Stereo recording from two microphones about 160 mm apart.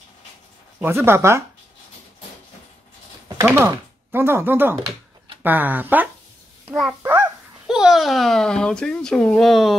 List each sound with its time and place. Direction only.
0.7 s speech: 15° right (ahead or behind)
3.4 s speech: 15° right (ahead or behind)
7.6 s speech: 5° right (ahead or behind)